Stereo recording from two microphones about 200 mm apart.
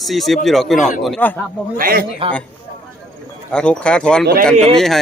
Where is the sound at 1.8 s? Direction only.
45° right (ahead or behind).